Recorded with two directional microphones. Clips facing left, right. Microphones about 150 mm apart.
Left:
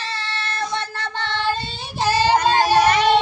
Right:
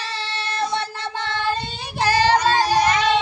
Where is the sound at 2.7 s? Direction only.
60° left (ahead or behind).